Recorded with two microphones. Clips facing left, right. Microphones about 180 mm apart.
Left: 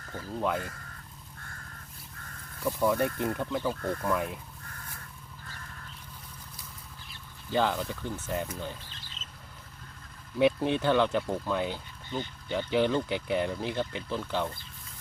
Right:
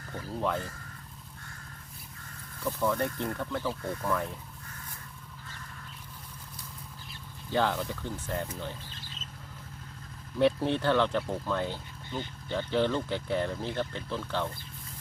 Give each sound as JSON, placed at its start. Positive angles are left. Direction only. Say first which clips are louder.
{"t": 0.3, "sound": "speech", "louder": "left 1 dB", "side_deg": 5}
{"t": 2.6, "sound": "speech", "louder": "left 3 dB", "side_deg": 15}
{"t": 7.5, "sound": "speech", "louder": "left 1 dB", "side_deg": 0}
{"t": 10.3, "sound": "speech", "louder": "left 1 dB", "side_deg": 5}